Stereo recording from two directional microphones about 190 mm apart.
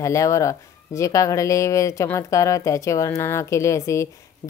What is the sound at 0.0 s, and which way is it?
Speech, 15° left (ahead or behind).